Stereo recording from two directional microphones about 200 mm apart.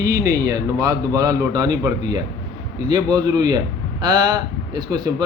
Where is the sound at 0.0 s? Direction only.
15° right (ahead or behind).